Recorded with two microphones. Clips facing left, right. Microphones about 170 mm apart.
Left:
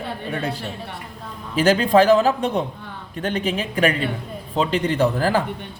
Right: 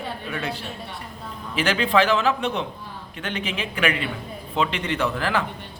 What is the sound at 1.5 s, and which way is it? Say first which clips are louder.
A woman's voice: left 5 dB; 40° left (ahead or behind).